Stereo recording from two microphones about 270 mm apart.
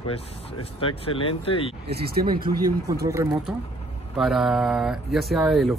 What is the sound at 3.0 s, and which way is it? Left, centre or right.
Speech, centre.